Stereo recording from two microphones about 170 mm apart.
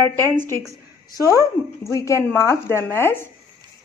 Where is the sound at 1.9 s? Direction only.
20° left (ahead or behind).